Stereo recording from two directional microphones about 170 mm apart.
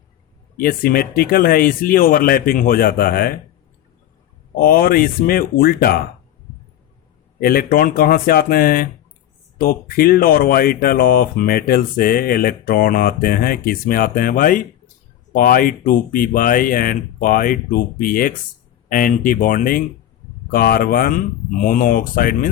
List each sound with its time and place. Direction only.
0.5 s speech: 60° left (ahead or behind)
4.6 s speech: 60° left (ahead or behind)
7.3 s speech: 60° left (ahead or behind)